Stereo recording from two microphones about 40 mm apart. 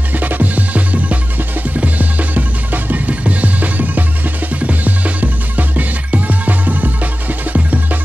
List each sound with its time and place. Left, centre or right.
0.1 s music: right